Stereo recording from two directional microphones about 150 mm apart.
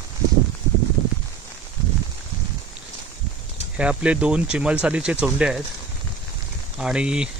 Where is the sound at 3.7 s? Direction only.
10° right (ahead or behind).